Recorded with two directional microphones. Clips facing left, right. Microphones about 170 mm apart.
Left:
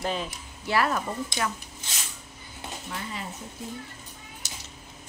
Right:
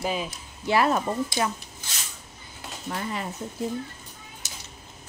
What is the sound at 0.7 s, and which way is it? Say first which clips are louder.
Speech: right 4 dB; 20° right (ahead or behind).